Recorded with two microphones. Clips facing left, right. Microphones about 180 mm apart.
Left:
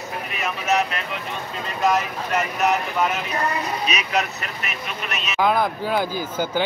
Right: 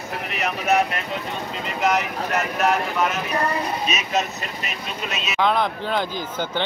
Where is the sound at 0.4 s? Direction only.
55° right (ahead or behind).